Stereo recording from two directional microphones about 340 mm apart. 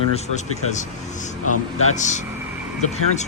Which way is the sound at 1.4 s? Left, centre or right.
Left.